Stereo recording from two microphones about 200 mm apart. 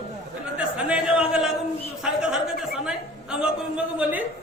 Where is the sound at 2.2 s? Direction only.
5° right (ahead or behind).